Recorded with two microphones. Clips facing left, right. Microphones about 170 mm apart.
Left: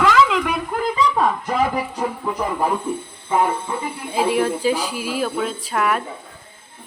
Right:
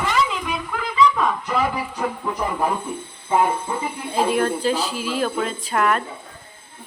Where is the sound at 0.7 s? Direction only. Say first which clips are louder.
Left 3 dB; 45° left (ahead or behind).